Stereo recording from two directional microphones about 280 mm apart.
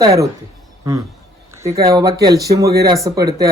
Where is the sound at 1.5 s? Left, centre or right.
Centre.